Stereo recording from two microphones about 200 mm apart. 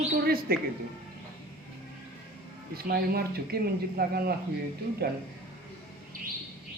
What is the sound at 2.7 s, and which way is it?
Speech, 50° right (ahead or behind).